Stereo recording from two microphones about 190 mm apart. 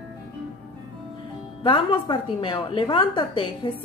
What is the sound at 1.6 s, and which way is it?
A woman's voice, 25° left (ahead or behind).